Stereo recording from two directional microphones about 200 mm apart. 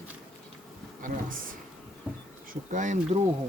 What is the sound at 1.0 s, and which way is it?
Speech, 45° right (ahead or behind).